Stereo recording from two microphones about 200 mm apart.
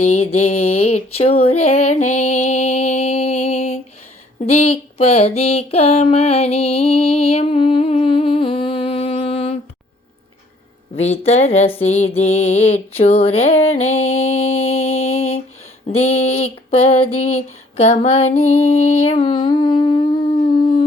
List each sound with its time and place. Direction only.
0.0 s music: 35° left (ahead or behind)
4.4 s a sound: 30° left (ahead or behind)
10.9 s music: 30° left (ahead or behind)
15.9 s music: 30° left (ahead or behind)
17.2 s female singing: 30° left (ahead or behind)